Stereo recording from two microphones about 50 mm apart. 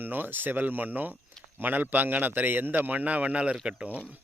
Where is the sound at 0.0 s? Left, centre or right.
Right.